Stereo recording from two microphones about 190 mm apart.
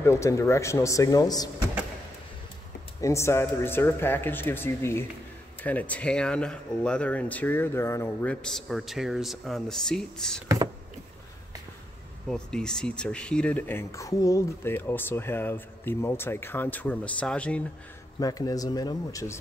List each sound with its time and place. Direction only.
0.0 s speech: 15° left (ahead or behind)
3.0 s speech: 15° left (ahead or behind)
12.3 s speech: 5° left (ahead or behind)
18.2 s speech: 20° left (ahead or behind)